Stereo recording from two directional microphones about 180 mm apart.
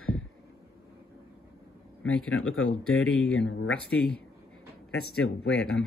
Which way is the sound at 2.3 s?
90° left.